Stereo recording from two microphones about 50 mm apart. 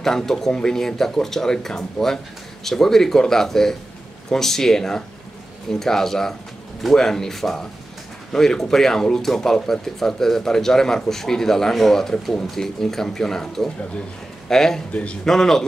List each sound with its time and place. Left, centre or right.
0.0 s speech: centre
14.9 s a man's voice: left
15.2 s speech: centre